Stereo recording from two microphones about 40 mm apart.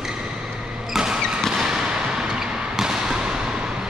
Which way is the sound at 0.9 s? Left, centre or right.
Centre.